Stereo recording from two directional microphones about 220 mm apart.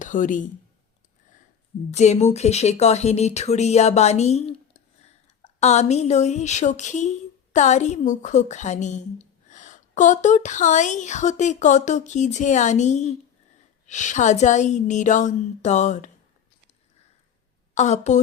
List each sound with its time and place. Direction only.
0.0 s speech: 35° left (ahead or behind)
1.9 s a woman's voice: 30° left (ahead or behind)
17.7 s a woman's voice: 30° left (ahead or behind)